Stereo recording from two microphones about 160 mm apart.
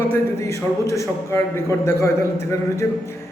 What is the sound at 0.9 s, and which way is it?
A man's voice, 20° left (ahead or behind).